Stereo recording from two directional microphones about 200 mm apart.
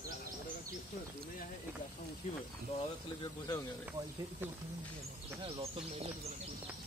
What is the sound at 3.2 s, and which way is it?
Speech, 20° left (ahead or behind).